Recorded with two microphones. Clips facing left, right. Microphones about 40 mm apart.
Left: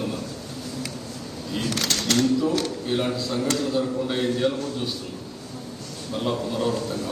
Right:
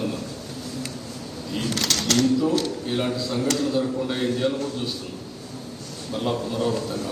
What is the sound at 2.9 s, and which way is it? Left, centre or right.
A man's voice, centre.